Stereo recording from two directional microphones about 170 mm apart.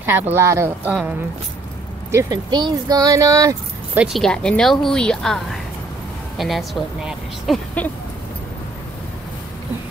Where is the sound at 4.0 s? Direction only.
Centre (ahead or behind).